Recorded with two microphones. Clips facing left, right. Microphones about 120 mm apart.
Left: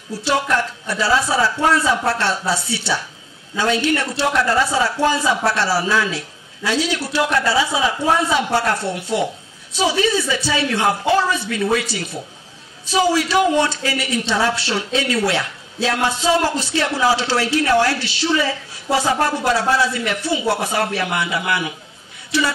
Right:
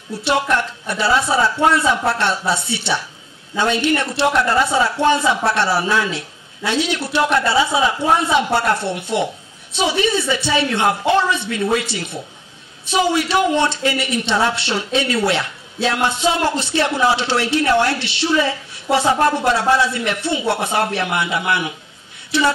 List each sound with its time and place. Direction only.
0.2 s speech: 25° right (ahead or behind)